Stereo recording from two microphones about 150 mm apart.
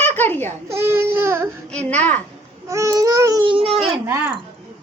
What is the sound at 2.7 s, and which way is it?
A child's voice, 20° right (ahead or behind).